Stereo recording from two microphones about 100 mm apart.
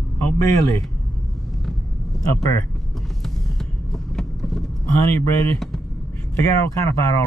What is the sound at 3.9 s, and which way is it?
Vehicle, centre (ahead or behind).